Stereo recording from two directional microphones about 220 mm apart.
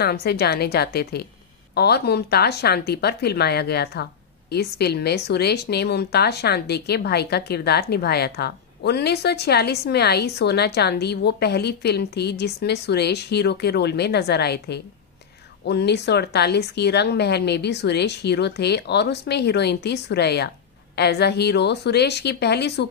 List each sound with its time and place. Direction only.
0.0 s speech: 45° left (ahead or behind)